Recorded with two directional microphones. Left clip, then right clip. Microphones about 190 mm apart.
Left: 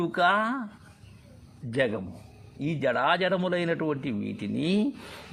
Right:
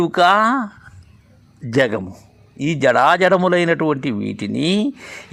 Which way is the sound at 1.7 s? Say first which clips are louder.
Right 10 dB; 40° right (ahead or behind).